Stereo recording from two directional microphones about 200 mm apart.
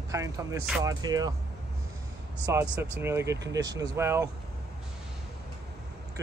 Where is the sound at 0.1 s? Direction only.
15° right (ahead or behind).